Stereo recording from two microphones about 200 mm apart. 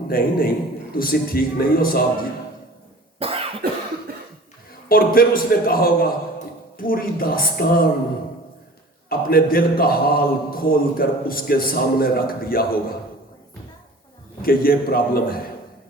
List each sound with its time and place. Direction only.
0.1 s a man's voice: 45° left (ahead or behind)
3.2 s cough: 30° right (ahead or behind)
3.6 s cough: 50° right (ahead or behind)
4.9 s a man's voice: 45° left (ahead or behind)
9.0 s a man's voice: 45° left (ahead or behind)
14.4 s a man's voice: 45° left (ahead or behind)